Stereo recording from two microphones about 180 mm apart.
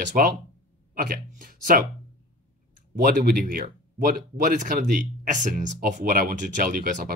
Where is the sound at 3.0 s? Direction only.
50° right (ahead or behind).